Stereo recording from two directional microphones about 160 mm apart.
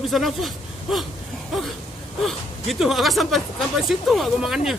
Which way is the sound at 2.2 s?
Centre (ahead or behind).